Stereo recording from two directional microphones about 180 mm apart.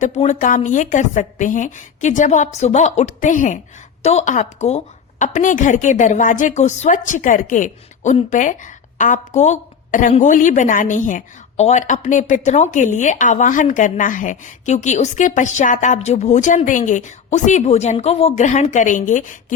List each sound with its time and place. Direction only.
0.0 s a woman's voice: 40° left (ahead or behind)